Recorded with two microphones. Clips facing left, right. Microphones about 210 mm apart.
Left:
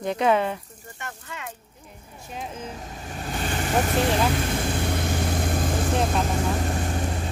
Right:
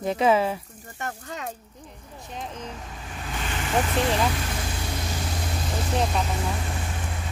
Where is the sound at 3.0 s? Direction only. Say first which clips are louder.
Left 5 dB; 40° left (ahead or behind).